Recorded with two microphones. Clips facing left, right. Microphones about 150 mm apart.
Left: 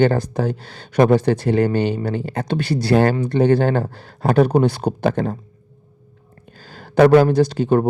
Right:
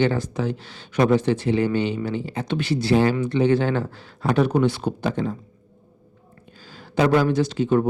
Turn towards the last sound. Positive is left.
turn(degrees=45)  # may be behind; listen again after turning